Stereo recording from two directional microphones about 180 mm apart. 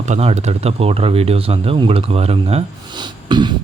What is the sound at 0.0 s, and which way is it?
Speech, 35° right (ahead or behind).